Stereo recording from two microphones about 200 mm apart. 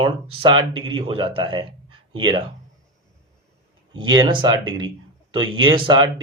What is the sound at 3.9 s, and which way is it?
Speech, 20° right (ahead or behind).